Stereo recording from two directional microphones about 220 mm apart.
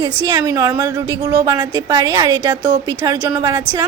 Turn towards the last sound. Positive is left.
turn(degrees=-15)  # may be behind; listen again after turning